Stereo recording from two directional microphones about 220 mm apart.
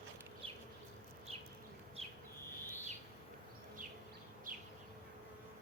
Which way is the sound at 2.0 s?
25° right (ahead or behind).